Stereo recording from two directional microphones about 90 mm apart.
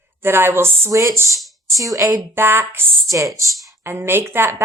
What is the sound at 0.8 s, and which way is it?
Speech, 35° right (ahead or behind).